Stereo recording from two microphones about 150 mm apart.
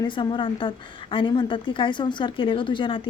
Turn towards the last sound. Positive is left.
turn(degrees=35)  # may be behind; listen again after turning